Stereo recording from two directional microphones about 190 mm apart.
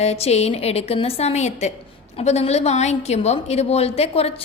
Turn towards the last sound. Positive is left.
turn(degrees=30)  # may be behind; listen again after turning